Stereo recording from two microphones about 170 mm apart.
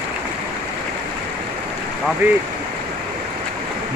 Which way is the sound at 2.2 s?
15° right (ahead or behind).